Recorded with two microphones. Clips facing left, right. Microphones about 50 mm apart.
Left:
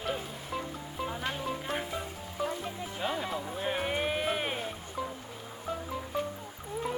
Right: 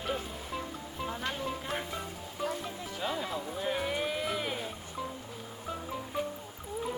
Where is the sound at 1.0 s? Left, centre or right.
Centre; by 4.7 s left.